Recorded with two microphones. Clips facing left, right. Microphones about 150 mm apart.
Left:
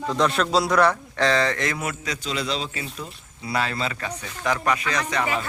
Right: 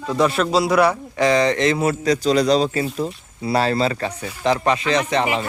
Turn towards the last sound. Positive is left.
turn(degrees=-25)  # may be behind; listen again after turning